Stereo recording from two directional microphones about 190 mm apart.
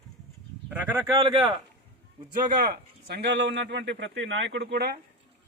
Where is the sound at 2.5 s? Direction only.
55° right (ahead or behind).